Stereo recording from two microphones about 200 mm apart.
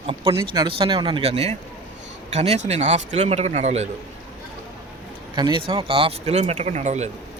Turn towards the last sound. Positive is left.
turn(degrees=-35)  # may be behind; listen again after turning